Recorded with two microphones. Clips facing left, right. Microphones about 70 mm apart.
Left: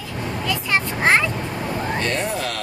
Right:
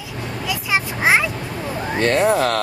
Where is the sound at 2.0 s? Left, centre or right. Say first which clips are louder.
Right 7 dB; right.